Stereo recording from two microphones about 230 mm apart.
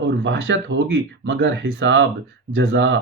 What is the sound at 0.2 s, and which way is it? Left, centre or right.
Speech, right.